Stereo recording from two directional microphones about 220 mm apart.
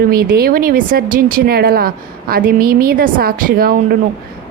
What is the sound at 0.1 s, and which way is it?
Speech, 45° right (ahead or behind).